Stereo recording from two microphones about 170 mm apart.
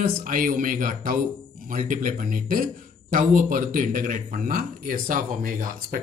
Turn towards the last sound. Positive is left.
turn(degrees=-55)  # may be behind; listen again after turning